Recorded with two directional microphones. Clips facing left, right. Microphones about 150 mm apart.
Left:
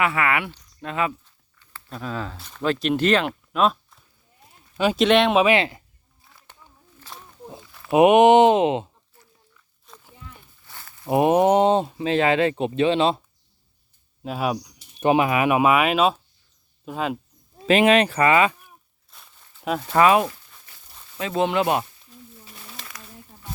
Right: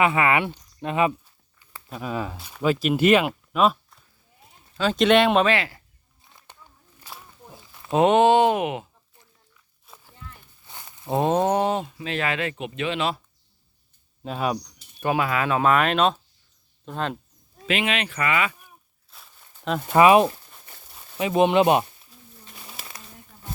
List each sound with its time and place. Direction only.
0.0 s speech: 20° right (ahead or behind); by 5.5 s centre (ahead or behind)
5.5 s speech: 20° left (ahead or behind)
7.1 s snake: 10° right (ahead or behind)
7.9 s speech: 15° left (ahead or behind)
9.9 s a sound: 5° right (ahead or behind)
10.7 s a sound: 20° right (ahead or behind)
11.0 s speech: 15° left (ahead or behind)
14.3 s speech: 5° left (ahead or behind)
15.0 s speech: 20° left (ahead or behind)
17.7 s speech: 40° left (ahead or behind)
19.1 s walk: centre (ahead or behind)
19.9 s speech: 15° right (ahead or behind)
22.8 s a sound: 10° right (ahead or behind)